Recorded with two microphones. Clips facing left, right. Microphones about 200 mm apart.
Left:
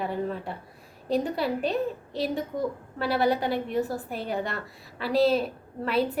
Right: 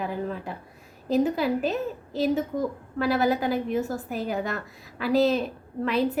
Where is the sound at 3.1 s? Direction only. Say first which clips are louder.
Even; centre (ahead or behind).